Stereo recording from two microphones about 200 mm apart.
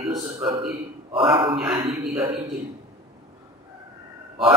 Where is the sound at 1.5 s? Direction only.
5° right (ahead or behind).